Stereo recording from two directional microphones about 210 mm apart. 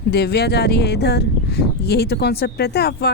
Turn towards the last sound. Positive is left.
turn(degrees=50)  # may be behind; listen again after turning